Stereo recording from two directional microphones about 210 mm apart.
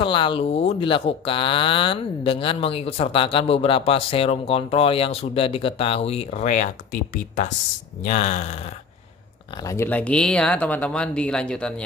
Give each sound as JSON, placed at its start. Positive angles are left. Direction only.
{"t": 0.0, "sound": "speech", "side_deg": 25}
{"t": 8.0, "sound": "speech", "side_deg": 35}
{"t": 9.7, "sound": "speech", "side_deg": 10}